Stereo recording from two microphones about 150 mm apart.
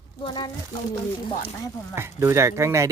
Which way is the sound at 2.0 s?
15° right (ahead or behind).